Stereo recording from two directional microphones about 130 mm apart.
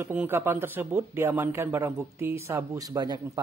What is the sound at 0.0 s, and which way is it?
Speech, 15° right (ahead or behind).